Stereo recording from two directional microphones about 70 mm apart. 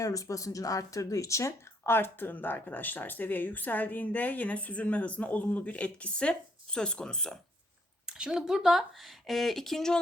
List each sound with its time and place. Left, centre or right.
0.0 s speech: left; by 7.3 s centre
8.0 s speech: centre